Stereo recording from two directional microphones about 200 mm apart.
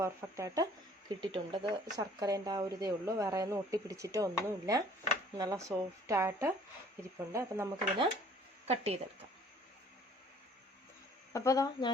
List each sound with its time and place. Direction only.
0.0 s speech: 15° right (ahead or behind)
8.6 s speech: 30° right (ahead or behind)
11.3 s speech: 15° left (ahead or behind)